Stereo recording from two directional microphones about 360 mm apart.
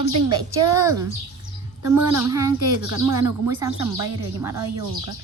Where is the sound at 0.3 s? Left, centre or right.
Centre.